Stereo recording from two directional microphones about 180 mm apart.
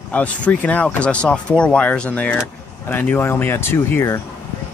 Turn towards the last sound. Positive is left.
turn(degrees=15)  # may be behind; listen again after turning